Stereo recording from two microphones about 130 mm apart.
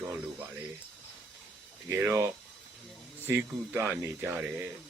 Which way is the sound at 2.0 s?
20° right (ahead or behind).